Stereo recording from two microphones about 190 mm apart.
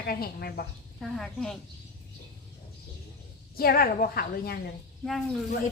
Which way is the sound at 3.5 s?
50° left (ahead or behind).